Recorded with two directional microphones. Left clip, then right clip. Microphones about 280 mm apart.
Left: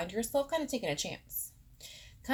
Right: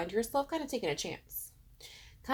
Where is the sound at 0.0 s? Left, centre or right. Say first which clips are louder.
Even; right.